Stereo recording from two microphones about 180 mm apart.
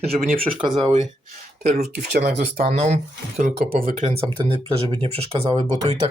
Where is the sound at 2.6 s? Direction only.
40° right (ahead or behind).